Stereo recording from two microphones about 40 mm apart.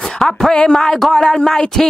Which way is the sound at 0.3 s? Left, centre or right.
Centre.